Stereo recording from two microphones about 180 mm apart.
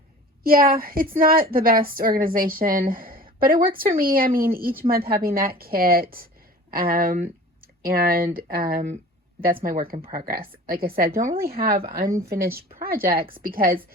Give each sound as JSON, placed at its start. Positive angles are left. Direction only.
{"t": 0.4, "sound": "a woman's voice", "side_deg": -55}